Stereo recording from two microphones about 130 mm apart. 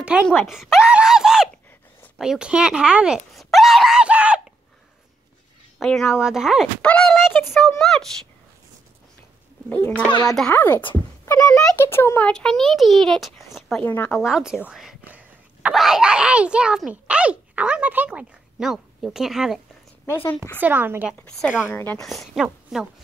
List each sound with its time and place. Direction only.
0.0 s speech: 10° right (ahead or behind)
0.4 s a sound: centre (ahead or behind)
2.1 s a child's voice: 5° right (ahead or behind)
3.3 s screaming: centre (ahead or behind)
5.8 s a child's voice: 5° left (ahead or behind)
6.8 s a child's voice: 5° left (ahead or behind)
9.7 s a child's voice: 15° left (ahead or behind)
12.3 s a child's voice: 5° left (ahead or behind)
13.8 s a child's voice: 15° left (ahead or behind)
14.1 s speech: 5° right (ahead or behind)
20.6 s a woman's voice: 15° right (ahead or behind)
21.2 s a child's voice: 5° left (ahead or behind)
22.0 s a child's voice: centre (ahead or behind)